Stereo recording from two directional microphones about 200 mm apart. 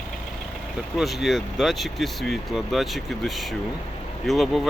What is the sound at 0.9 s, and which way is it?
Speech, centre (ahead or behind).